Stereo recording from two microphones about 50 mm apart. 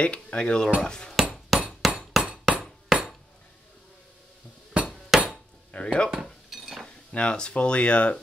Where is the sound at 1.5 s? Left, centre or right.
Centre.